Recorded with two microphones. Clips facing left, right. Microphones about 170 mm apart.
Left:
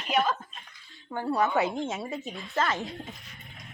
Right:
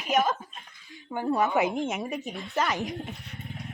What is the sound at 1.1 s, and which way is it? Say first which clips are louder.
A woman's voice: right 1 dB; 15° right (ahead or behind).